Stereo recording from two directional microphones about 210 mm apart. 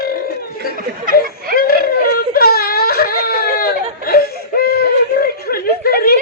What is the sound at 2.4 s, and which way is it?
Wail, 45° left (ahead or behind).